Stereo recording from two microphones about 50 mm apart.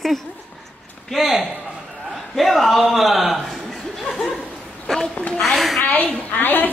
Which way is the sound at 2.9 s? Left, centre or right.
Centre.